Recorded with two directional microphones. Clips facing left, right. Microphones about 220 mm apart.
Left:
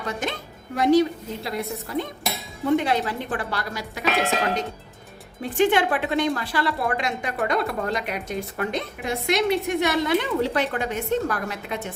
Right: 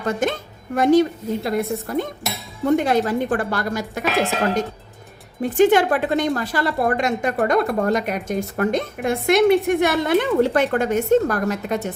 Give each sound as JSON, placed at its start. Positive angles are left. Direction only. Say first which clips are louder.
{"t": 0.0, "sound": "speech", "louder": "right 7 dB", "side_deg": -50}
{"t": 5.4, "sound": "speech", "louder": "right 5 dB", "side_deg": -45}